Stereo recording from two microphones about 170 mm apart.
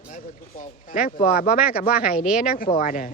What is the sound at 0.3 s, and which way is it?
Speech, 50° left (ahead or behind).